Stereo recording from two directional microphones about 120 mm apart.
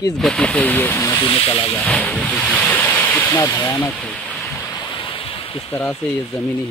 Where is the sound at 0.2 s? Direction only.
5° left (ahead or behind).